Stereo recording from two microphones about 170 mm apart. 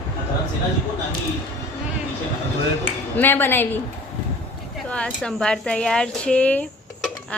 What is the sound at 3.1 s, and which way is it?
Speech, 10° left (ahead or behind).